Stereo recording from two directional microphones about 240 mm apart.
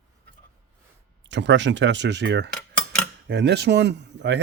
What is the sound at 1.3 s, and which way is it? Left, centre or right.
Speech, right.